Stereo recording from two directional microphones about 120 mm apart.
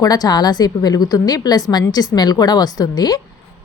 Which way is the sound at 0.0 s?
35° left (ahead or behind).